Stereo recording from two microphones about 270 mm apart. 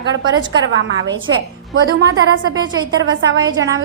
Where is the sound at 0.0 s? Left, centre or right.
Right.